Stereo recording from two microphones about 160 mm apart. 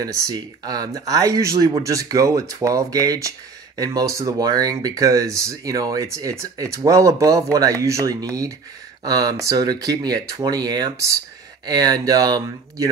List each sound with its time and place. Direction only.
0.0 s speech: 25° right (ahead or behind)